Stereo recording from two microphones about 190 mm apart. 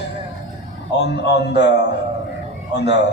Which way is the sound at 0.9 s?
65° left (ahead or behind).